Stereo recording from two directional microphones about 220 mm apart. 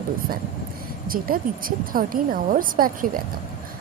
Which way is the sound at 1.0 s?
40° right (ahead or behind).